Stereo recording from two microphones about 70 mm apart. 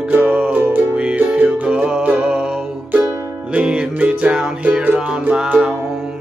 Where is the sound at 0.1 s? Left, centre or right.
Centre.